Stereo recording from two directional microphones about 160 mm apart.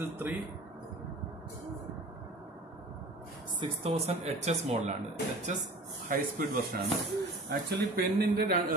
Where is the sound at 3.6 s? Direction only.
40° right (ahead or behind).